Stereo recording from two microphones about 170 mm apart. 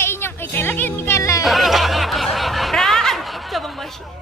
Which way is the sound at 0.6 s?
15° left (ahead or behind).